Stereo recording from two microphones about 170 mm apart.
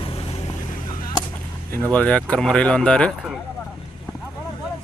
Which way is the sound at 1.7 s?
10° left (ahead or behind).